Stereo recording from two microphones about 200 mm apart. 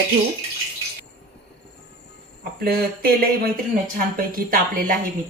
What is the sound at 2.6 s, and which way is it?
Speech, 50° right (ahead or behind).